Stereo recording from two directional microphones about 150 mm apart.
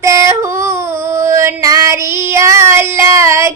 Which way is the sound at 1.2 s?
20° right (ahead or behind).